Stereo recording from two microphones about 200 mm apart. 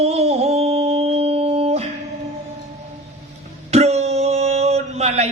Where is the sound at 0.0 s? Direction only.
30° right (ahead or behind).